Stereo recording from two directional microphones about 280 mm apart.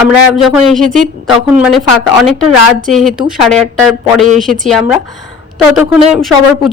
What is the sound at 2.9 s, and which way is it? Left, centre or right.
Speech, centre.